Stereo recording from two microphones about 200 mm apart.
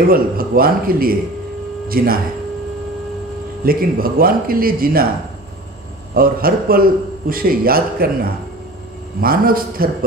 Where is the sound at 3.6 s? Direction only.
45° right (ahead or behind).